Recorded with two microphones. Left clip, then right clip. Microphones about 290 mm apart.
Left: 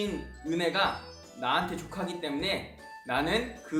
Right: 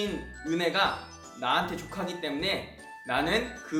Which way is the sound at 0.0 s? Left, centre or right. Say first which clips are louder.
Right 1 dB; centre.